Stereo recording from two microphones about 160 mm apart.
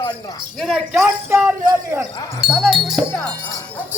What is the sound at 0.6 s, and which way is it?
A man's voice, 5° right (ahead or behind).